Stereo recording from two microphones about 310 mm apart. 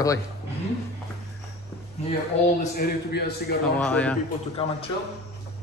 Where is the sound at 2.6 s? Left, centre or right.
Left.